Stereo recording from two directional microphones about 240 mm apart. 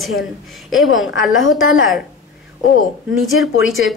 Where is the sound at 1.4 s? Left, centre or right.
Left.